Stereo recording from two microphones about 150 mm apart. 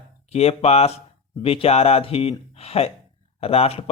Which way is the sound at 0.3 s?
45° left (ahead or behind).